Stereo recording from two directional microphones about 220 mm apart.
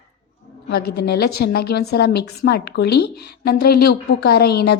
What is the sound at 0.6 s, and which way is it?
A woman's voice, 45° left (ahead or behind).